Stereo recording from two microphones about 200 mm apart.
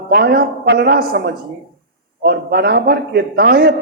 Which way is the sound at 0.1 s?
50° right (ahead or behind).